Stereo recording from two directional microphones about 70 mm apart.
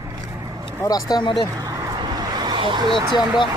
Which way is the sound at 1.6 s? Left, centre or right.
Right.